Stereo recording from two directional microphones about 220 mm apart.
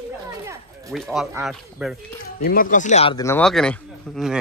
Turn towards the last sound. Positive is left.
turn(degrees=0)  # may be behind; listen again after turning